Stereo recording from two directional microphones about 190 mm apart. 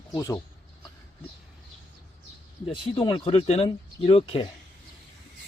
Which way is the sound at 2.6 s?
25° left (ahead or behind).